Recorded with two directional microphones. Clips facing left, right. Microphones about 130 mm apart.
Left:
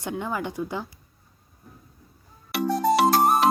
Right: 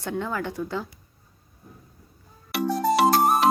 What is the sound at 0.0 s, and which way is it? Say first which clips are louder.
Speech: right 1 dB; 15° left (ahead or behind).